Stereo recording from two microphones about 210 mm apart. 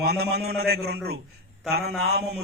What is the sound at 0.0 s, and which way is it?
A man's voice, 50° right (ahead or behind).